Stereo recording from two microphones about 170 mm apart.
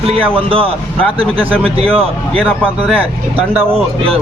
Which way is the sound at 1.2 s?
10° right (ahead or behind).